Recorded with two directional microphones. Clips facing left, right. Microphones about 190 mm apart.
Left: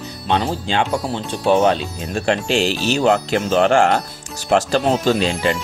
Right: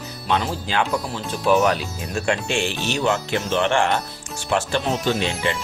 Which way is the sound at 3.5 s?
40° left (ahead or behind).